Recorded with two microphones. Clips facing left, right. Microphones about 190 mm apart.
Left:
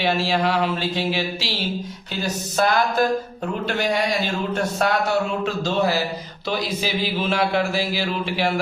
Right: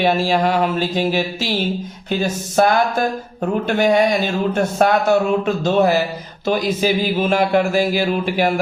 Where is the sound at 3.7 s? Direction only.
50° right (ahead or behind).